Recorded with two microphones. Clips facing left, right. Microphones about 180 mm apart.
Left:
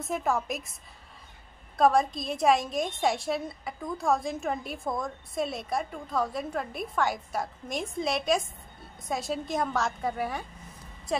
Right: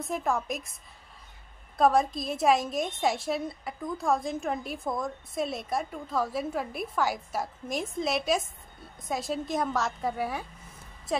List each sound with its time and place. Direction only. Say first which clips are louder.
0.0 s a woman's voice: left 1 dB; centre (ahead or behind)
1.8 s a woman's voice: even; centre (ahead or behind)